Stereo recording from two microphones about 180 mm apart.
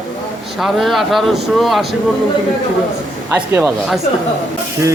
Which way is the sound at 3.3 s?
10° right (ahead or behind).